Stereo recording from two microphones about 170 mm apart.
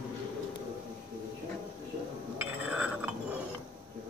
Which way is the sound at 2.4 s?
5° right (ahead or behind).